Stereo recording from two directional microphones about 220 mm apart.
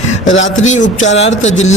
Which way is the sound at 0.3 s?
60° left (ahead or behind).